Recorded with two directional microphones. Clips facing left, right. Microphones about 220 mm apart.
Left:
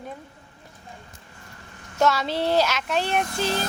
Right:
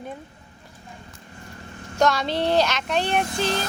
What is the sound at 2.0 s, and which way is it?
A woman's voice, 5° left (ahead or behind).